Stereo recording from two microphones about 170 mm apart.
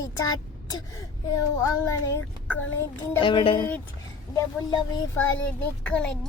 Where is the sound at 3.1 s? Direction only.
30° left (ahead or behind).